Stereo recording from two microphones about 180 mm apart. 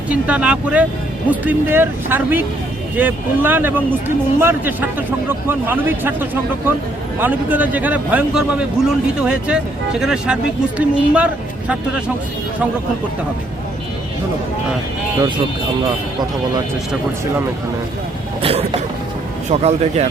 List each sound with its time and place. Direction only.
0.1 s a man's voice: 10° right (ahead or behind)
18.4 s speech: 30° right (ahead or behind)